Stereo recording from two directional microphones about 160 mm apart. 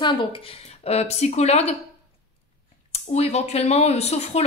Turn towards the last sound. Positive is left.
turn(degrees=40)  # may be behind; listen again after turning